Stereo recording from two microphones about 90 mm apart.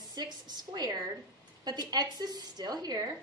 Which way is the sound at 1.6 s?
50° right (ahead or behind).